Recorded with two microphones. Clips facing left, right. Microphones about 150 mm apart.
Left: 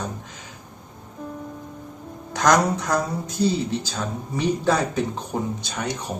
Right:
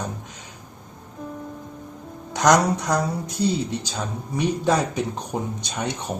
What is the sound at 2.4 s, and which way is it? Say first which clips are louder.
Speech: right 1 dB; 20° right (ahead or behind).